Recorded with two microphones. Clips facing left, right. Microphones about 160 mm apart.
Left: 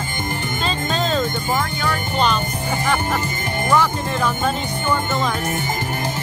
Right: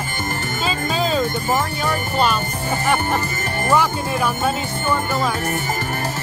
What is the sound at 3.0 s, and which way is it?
Music, 15° left (ahead or behind).